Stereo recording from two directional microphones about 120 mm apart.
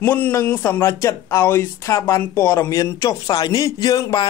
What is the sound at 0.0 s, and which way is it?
Speech, 15° left (ahead or behind).